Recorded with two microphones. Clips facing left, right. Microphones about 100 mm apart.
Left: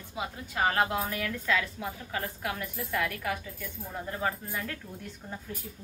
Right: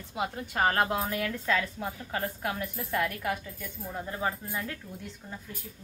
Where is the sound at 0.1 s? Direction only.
55° right (ahead or behind).